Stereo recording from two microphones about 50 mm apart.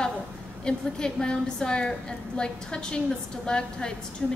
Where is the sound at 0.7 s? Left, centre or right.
Centre.